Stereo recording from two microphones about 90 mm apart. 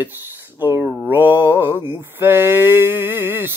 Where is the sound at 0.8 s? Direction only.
20° right (ahead or behind).